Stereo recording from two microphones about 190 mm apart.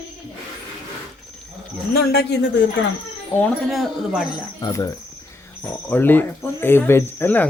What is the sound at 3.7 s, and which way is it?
Speech, centre (ahead or behind).